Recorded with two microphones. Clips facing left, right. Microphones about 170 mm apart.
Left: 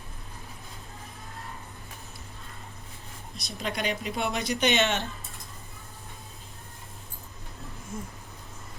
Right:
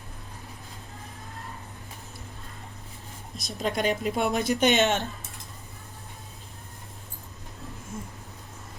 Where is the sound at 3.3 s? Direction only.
45° right (ahead or behind).